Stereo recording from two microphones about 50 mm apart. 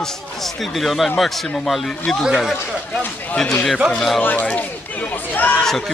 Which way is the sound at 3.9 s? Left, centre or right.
Centre.